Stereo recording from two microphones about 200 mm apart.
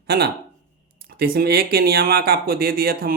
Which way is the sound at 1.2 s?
50° right (ahead or behind).